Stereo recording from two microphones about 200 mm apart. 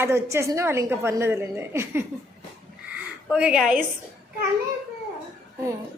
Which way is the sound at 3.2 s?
5° right (ahead or behind).